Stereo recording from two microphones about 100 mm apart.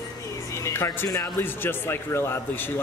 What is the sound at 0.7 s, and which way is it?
Speech, 25° left (ahead or behind).